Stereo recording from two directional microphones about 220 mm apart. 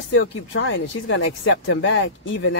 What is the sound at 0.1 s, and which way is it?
Speech, 55° left (ahead or behind).